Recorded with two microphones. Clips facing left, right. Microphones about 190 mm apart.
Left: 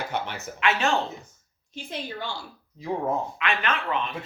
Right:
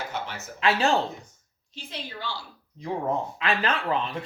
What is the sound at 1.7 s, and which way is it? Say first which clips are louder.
Speech: left 4 dB; 50° left (ahead or behind).